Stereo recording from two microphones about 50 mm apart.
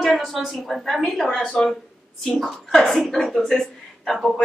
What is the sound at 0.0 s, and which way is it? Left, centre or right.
A woman's voice, centre.